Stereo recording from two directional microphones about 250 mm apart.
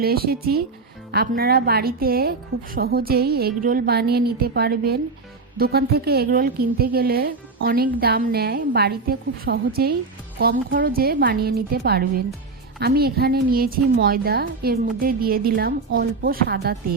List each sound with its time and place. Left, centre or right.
0.0 s a woman's voice: right